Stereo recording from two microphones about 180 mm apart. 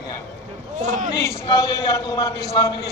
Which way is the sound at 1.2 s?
20° left (ahead or behind).